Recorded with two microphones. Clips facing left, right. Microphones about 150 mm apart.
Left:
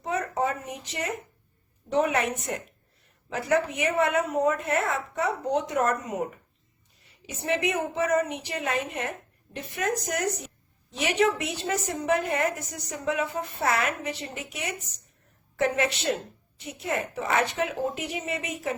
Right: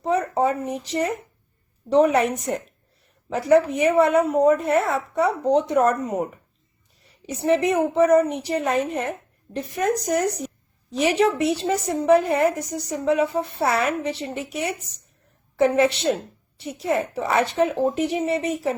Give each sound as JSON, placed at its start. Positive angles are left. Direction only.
{"t": 0.0, "sound": "a sound", "side_deg": -35}
{"t": 1.9, "sound": "a woman's voice", "side_deg": -35}
{"t": 7.3, "sound": "a woman's voice", "side_deg": -35}